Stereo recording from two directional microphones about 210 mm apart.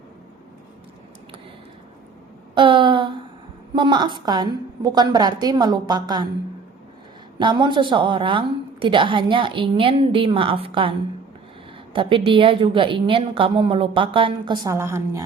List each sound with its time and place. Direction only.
2.6 s a sound: 25° right (ahead or behind)
3.8 s a woman's voice: 20° right (ahead or behind)
7.3 s a woman's voice: 20° right (ahead or behind)
11.9 s a woman's voice: 25° right (ahead or behind)